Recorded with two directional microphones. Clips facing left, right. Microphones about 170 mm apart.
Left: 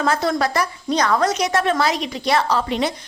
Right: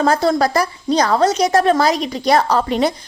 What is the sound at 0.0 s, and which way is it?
A woman's voice, 35° right (ahead or behind).